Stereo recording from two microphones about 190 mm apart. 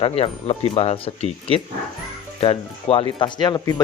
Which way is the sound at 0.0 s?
30° left (ahead or behind).